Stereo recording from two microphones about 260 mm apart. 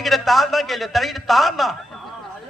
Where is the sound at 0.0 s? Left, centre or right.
Centre.